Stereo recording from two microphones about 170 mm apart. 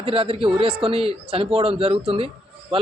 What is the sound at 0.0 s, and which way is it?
A man's voice, 35° right (ahead or behind).